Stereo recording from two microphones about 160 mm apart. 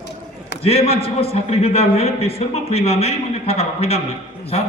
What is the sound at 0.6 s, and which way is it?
A man's voice, 40° left (ahead or behind).